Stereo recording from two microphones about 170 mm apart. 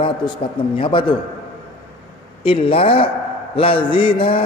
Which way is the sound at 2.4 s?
30° left (ahead or behind).